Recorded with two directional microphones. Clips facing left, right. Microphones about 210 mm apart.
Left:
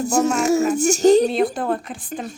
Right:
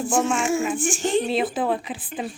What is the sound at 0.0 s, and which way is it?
Speech, 40° left (ahead or behind).